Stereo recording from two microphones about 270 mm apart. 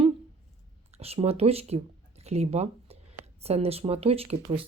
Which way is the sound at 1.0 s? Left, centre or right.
Right.